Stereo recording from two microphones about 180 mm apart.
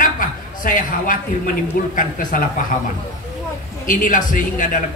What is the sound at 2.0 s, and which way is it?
Speech, 50° left (ahead or behind).